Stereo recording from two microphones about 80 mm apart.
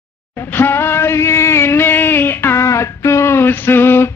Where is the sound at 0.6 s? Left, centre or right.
Left.